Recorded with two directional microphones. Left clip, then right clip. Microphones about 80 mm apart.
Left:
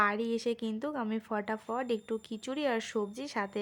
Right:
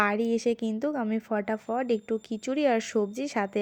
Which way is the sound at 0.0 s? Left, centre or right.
Right.